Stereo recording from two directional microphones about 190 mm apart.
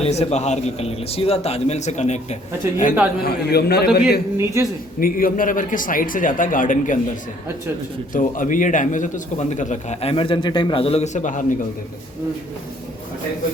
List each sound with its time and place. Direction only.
0.0 s a man's voice: 35° left (ahead or behind)
3.2 s a man's voice: 55° left (ahead or behind)
4.4 s speech: 15° right (ahead or behind)
4.9 s a man's voice: 50° left (ahead or behind)
8.1 s a man's voice: 45° left (ahead or behind)